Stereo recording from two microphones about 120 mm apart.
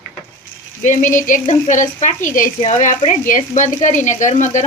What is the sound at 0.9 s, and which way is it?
Speech, 90° left.